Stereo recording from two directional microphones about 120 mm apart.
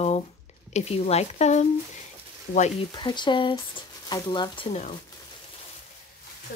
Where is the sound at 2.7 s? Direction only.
40° left (ahead or behind).